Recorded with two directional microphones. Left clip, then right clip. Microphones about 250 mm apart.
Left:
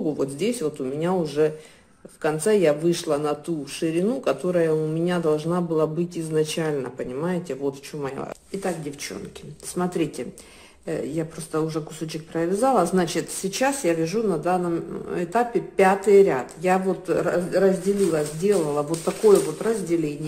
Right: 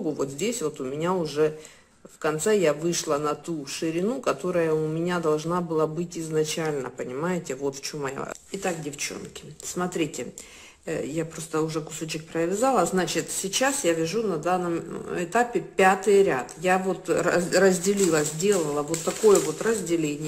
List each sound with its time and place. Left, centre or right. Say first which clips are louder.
0.2 s a man's voice: left 3 dB; centre